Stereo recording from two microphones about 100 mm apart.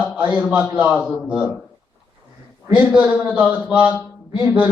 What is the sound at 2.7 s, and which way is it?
A man's voice, 15° right (ahead or behind).